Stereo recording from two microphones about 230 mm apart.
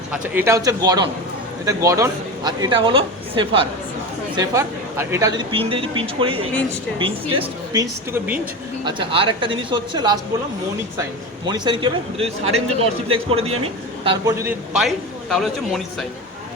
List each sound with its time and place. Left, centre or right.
0.1 s a woman's voice: centre
4.4 s speech: centre
11.4 s speech: centre
14.8 s speech: centre